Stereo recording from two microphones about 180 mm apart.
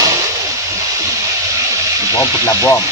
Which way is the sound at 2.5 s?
20° left (ahead or behind).